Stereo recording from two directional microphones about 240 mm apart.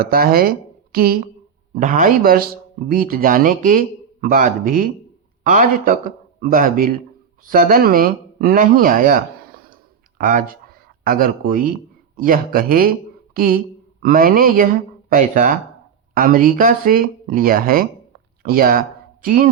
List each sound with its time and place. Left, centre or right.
0.0 s a man's voice: right